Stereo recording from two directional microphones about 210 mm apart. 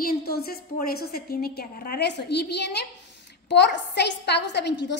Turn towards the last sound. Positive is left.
turn(degrees=55)  # may be behind; listen again after turning